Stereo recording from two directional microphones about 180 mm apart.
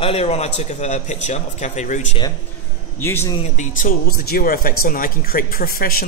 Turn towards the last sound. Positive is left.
turn(degrees=55)  # may be behind; listen again after turning